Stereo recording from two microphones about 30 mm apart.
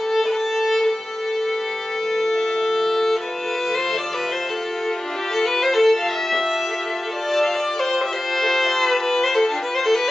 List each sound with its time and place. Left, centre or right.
0.1 s violin: centre
2.1 s violin: centre
5.4 s music: centre
7.3 s violin: centre